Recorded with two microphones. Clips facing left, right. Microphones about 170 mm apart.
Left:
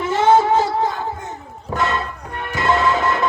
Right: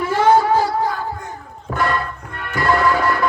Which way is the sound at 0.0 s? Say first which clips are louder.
Even; 20° left (ahead or behind).